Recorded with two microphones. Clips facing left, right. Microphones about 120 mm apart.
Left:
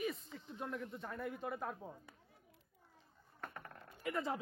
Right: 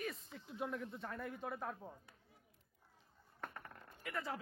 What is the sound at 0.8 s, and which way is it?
Speech, centre (ahead or behind).